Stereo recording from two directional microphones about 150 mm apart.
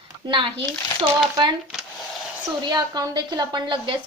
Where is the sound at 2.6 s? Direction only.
30° right (ahead or behind).